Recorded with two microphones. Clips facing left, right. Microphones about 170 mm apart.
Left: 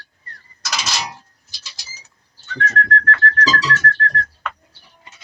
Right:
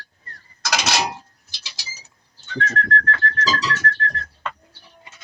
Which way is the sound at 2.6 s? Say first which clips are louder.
Left 2 dB; 30° right (ahead or behind).